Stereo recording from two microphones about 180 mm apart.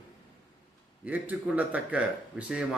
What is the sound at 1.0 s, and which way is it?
Speech, 10° right (ahead or behind).